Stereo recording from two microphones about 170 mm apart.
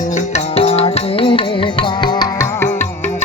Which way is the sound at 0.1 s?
40° left (ahead or behind).